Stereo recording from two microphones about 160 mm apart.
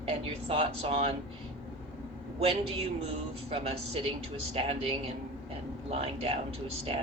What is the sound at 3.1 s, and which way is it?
Speech, 40° right (ahead or behind).